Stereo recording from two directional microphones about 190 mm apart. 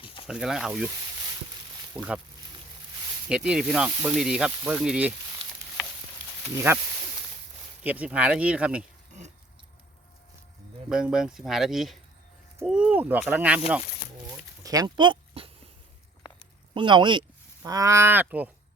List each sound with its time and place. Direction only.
0.0 s a sound: 25° left (ahead or behind)
0.3 s speech: 5° right (ahead or behind)
1.9 s speech: 5° right (ahead or behind)
3.2 s speech: 5° right (ahead or behind)
6.5 s speech: 15° right (ahead or behind)
7.9 s speech: 5° right (ahead or behind)
10.8 s speech: 5° right (ahead or behind)
14.6 s a sound: 20° right (ahead or behind)
16.7 s speech: 25° right (ahead or behind); by 18.5 s 10° right (ahead or behind)